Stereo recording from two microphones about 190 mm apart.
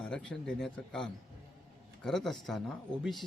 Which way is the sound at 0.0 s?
5° left (ahead or behind).